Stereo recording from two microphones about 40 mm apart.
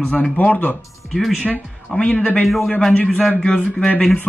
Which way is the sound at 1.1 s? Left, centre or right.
Centre.